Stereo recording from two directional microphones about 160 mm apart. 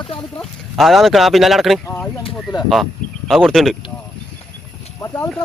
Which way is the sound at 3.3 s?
Centre (ahead or behind).